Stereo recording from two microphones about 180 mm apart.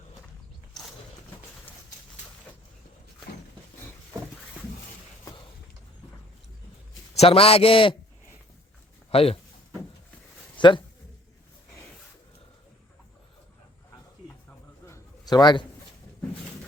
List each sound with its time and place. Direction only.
7.2 s a man's voice: 35° left (ahead or behind)
9.0 s speech: 35° left (ahead or behind)
10.6 s speech: 25° left (ahead or behind)
14.8 s a sound: 20° left (ahead or behind)